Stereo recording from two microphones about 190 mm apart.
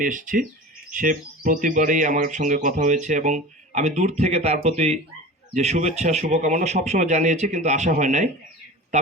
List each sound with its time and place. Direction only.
0.0 s speech: 45° right (ahead or behind)